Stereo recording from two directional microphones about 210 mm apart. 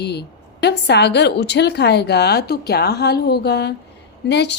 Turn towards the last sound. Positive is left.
turn(degrees=55)  # may be behind; listen again after turning